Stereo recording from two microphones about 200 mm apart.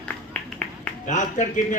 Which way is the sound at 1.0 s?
40° left (ahead or behind).